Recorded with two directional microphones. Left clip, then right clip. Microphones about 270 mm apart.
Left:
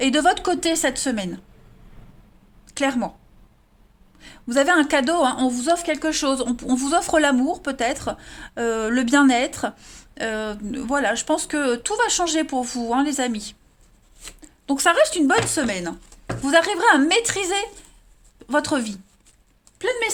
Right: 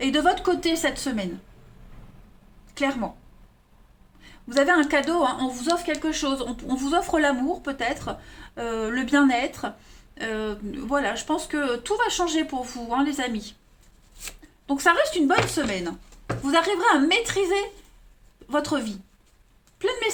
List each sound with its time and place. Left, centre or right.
0.0 s speech: left
2.7 s speech: left
4.2 s a woman's voice: left
14.7 s a woman's voice: left